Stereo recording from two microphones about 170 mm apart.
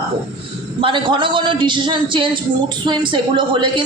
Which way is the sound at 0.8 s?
30° right (ahead or behind).